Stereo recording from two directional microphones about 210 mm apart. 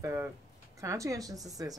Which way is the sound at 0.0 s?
10° right (ahead or behind).